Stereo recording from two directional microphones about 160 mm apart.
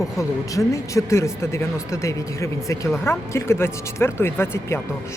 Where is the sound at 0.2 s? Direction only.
20° left (ahead or behind).